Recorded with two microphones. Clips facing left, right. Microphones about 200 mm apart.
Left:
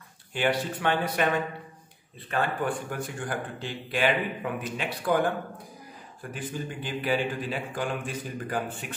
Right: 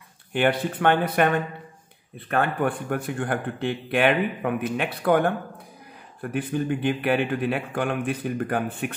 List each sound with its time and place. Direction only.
0.3 s a man's voice: 55° right (ahead or behind)
6.3 s a man's voice: 60° right (ahead or behind)